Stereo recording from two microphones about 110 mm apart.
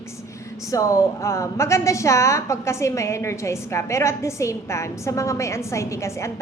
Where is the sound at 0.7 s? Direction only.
30° left (ahead or behind).